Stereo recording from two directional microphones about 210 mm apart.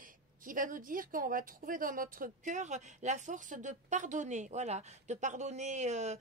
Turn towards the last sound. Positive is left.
turn(degrees=-35)  # may be behind; listen again after turning